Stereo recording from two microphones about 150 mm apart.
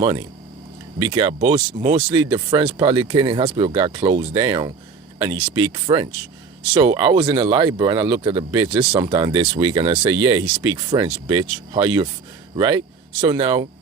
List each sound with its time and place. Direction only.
0.0 s speech: 35° right (ahead or behind)